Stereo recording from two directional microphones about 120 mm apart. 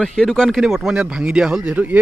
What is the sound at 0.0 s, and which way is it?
Speech, 5° left (ahead or behind).